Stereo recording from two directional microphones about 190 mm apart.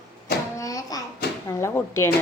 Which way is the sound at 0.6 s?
20° left (ahead or behind).